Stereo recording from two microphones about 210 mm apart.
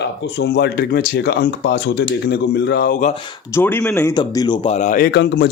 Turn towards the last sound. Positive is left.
turn(degrees=55)  # may be behind; listen again after turning